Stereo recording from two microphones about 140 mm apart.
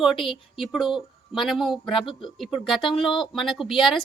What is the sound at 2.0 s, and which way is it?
Speech, 35° left (ahead or behind).